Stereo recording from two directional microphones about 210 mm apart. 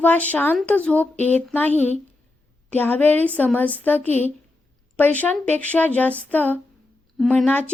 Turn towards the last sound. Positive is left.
turn(degrees=5)  # may be behind; listen again after turning